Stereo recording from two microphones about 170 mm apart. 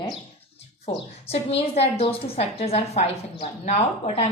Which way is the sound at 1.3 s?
35° left (ahead or behind).